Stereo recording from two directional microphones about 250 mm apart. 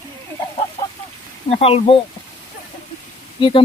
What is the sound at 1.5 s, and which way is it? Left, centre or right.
Speech, left.